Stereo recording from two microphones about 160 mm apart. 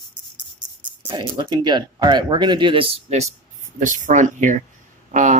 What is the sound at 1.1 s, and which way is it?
Speech, 30° right (ahead or behind).